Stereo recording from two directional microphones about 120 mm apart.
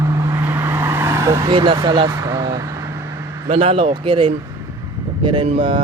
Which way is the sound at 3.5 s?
55° right (ahead or behind).